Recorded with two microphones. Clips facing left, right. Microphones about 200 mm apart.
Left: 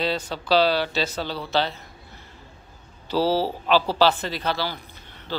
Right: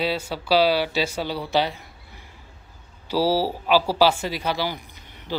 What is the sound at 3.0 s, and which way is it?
A man's voice, 10° right (ahead or behind).